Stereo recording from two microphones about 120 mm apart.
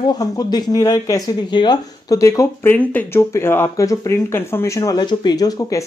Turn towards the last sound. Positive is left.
turn(degrees=30)  # may be behind; listen again after turning